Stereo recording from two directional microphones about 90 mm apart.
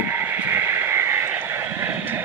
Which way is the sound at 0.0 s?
25° right (ahead or behind).